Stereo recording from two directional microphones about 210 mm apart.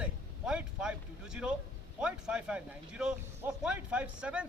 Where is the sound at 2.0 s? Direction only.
5° right (ahead or behind).